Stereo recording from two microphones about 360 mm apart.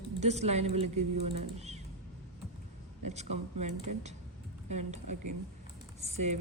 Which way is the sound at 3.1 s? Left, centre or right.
Centre.